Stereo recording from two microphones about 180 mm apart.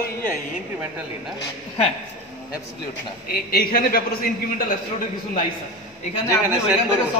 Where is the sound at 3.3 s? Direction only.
55° left (ahead or behind).